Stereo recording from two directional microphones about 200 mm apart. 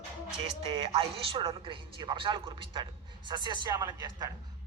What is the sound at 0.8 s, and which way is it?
A man's voice, 30° right (ahead or behind).